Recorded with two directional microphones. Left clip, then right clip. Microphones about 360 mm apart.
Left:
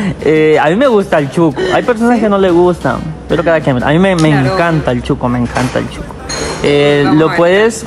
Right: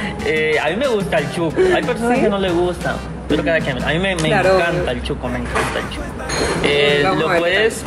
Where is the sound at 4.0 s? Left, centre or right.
Left.